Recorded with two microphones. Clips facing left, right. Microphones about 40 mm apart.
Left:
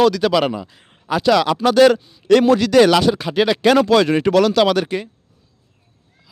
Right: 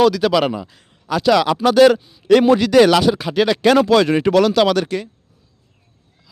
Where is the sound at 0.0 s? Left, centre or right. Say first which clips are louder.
Right 1 dB; centre.